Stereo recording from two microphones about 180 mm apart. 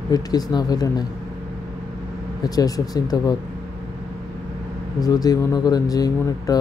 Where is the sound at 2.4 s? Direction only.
20° left (ahead or behind).